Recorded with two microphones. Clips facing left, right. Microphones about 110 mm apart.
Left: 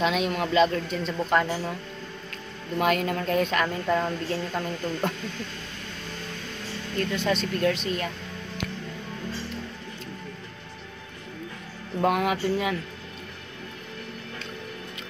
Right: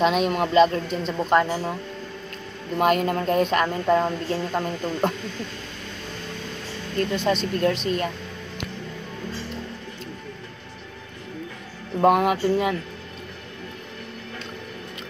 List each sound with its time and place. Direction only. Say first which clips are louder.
0.0 s speech: right 4 dB; 45° right (ahead or behind); by 1.8 s 30° right (ahead or behind)
2.8 s speech: right 4 dB; 40° right (ahead or behind)
7.0 s speech: right 3 dB; 35° right (ahead or behind)
12.0 s speech: right 5 dB; 40° right (ahead or behind)